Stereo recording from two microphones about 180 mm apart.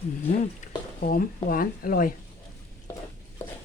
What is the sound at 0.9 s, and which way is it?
Speech, 50° left (ahead or behind).